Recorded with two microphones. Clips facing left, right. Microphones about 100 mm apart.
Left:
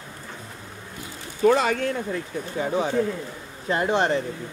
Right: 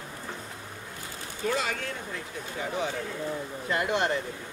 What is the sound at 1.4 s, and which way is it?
Speech, 50° left (ahead or behind).